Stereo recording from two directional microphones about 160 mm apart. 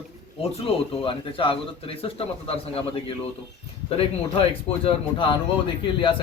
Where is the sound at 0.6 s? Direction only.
35° left (ahead or behind).